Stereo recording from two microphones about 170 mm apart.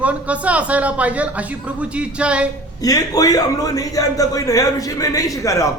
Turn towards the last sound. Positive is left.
turn(degrees=20)  # may be behind; listen again after turning